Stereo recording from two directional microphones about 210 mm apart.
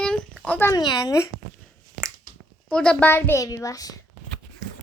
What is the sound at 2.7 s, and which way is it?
A woman's voice, 5° left (ahead or behind).